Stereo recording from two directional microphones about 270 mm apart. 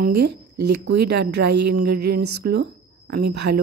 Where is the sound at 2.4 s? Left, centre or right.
Right.